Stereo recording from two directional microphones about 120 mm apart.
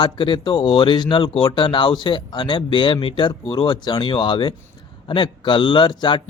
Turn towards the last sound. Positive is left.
turn(degrees=40)  # may be behind; listen again after turning